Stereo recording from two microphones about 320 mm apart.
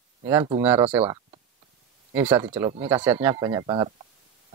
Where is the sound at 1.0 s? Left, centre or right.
Centre.